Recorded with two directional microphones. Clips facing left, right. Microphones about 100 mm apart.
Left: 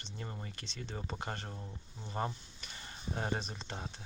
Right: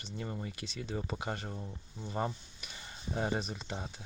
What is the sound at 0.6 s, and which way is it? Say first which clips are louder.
Speech: right 5 dB; 30° left (ahead or behind).